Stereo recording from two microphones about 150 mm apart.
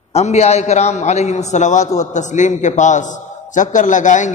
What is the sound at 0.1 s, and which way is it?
A man's voice, 45° left (ahead or behind).